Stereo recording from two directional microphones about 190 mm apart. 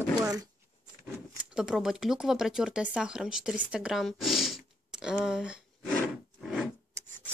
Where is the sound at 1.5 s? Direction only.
5° right (ahead or behind).